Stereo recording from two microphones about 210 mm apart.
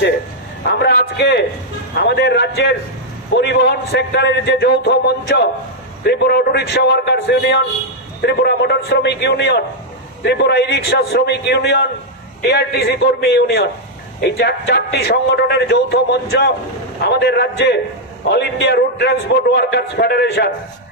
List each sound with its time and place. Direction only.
0.7 s a man's voice: 50° left (ahead or behind)